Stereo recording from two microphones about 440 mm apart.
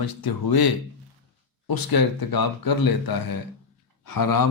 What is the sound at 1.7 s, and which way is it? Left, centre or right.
Speech, left.